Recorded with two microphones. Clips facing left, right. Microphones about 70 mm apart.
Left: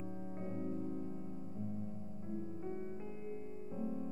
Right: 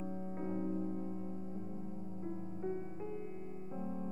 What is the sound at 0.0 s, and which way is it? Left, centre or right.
Music, centre.